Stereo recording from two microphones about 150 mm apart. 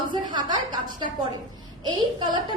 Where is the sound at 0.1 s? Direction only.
30° right (ahead or behind).